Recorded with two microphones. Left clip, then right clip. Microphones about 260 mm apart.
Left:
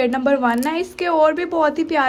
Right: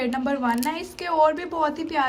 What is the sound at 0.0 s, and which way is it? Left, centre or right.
A woman's voice, centre.